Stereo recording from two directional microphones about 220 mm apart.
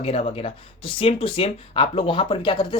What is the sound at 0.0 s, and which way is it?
Speech, 30° left (ahead or behind).